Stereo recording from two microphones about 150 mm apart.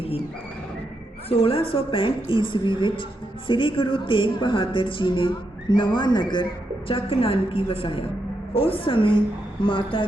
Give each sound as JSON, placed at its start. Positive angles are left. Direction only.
{"t": 1.3, "sound": "a woman's voice", "side_deg": 40}